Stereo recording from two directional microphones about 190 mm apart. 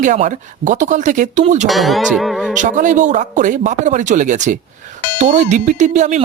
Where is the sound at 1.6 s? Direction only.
Centre (ahead or behind).